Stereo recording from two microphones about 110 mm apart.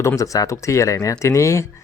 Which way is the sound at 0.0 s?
30° left (ahead or behind).